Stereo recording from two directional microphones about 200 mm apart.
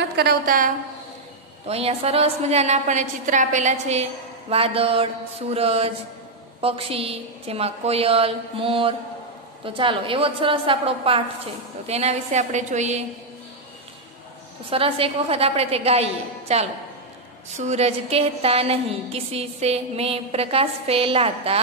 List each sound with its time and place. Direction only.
0.1 s a woman's voice: 50° right (ahead or behind)
1.7 s a woman's voice: 30° right (ahead or behind)
14.7 s a woman's voice: 30° right (ahead or behind)